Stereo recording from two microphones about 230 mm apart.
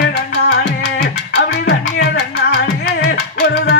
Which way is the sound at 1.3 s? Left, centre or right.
Left.